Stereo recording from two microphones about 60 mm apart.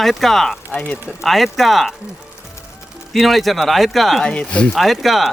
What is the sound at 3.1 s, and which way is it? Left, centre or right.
Speech, centre.